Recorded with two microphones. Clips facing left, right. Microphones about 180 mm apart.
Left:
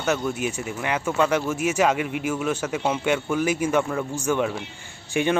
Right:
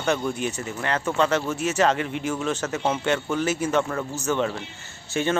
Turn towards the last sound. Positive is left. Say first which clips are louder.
# left 2 dB
turn(degrees=15)  # may be behind; listen again after turning